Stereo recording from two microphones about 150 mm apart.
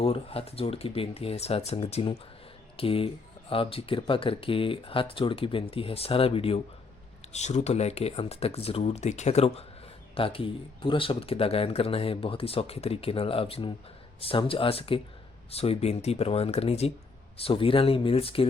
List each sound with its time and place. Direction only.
0.0 s speech: 40° left (ahead or behind)